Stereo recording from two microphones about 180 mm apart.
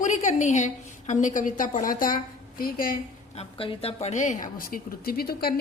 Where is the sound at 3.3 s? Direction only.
30° left (ahead or behind).